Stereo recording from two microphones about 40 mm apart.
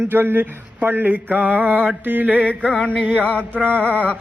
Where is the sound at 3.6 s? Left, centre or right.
Right.